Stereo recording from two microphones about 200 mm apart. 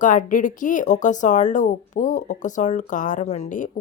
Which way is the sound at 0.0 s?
40° left (ahead or behind).